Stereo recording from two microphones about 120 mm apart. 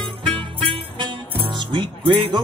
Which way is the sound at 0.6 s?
45° right (ahead or behind).